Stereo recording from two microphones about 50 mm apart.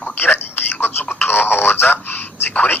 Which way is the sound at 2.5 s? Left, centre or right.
Left.